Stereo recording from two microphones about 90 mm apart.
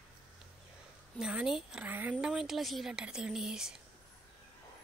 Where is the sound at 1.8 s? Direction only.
20° right (ahead or behind).